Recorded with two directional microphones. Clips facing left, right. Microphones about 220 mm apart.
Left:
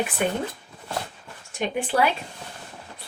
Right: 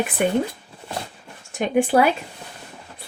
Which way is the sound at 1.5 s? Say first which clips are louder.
Right 6 dB; 50° right (ahead or behind).